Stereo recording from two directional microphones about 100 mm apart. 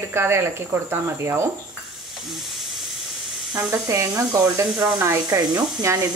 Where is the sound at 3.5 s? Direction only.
35° right (ahead or behind).